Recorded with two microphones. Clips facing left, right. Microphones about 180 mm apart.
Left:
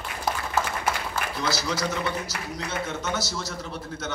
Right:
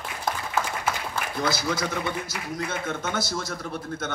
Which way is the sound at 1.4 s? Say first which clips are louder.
Right 2 dB; 50° right (ahead or behind).